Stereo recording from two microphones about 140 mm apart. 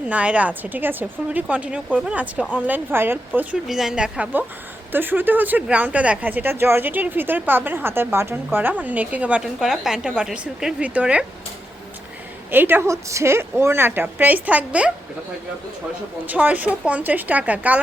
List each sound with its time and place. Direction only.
0.1 s a woman's voice: 10° right (ahead or behind)
12.5 s a woman's voice: 15° right (ahead or behind)
16.2 s a woman's voice: 10° right (ahead or behind)